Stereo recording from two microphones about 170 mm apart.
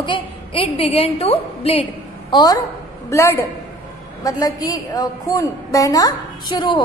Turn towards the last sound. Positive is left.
turn(degrees=25)  # may be behind; listen again after turning